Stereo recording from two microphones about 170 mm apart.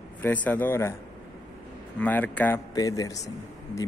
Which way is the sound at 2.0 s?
10° left (ahead or behind).